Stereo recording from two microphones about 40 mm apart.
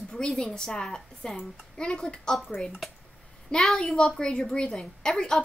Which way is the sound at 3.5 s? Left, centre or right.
Centre.